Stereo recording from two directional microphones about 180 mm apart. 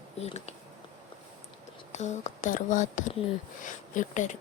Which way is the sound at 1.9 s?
40° left (ahead or behind).